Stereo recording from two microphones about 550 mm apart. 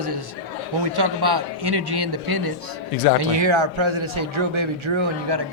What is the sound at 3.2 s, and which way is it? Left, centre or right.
Speech, right.